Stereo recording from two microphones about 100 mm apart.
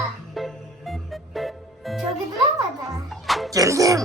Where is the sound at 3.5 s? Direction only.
35° right (ahead or behind).